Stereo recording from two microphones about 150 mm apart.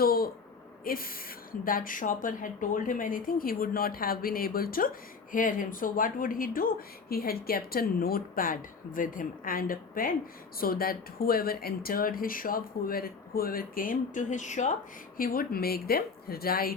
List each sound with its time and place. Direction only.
0.0 s a man's voice: 85° left
0.9 s speech: 75° left (ahead or behind)
5.3 s speech: 65° left (ahead or behind)
15.2 s a woman's voice: 75° left (ahead or behind)